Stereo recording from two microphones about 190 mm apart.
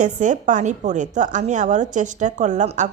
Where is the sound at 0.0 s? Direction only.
40° right (ahead or behind).